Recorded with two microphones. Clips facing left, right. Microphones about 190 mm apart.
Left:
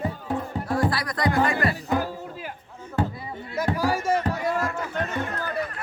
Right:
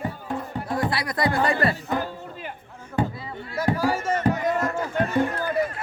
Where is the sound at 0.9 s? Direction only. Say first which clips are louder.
Right 1 dB; 25° right (ahead or behind).